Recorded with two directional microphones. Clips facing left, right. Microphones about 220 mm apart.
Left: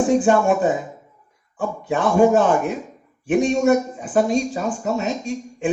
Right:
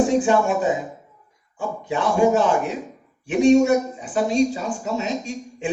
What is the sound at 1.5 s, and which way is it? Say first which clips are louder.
A man's voice: left 2 dB; 50° left (ahead or behind).